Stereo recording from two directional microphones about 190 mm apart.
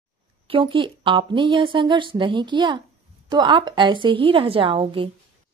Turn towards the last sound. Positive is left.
turn(degrees=-30)  # may be behind; listen again after turning